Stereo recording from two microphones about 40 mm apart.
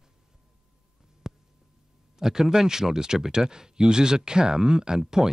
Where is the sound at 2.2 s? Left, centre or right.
Centre.